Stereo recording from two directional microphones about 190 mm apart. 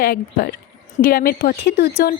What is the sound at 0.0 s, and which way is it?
Speech, 50° left (ahead or behind).